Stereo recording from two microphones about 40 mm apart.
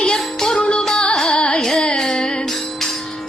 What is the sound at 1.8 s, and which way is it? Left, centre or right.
Music, centre.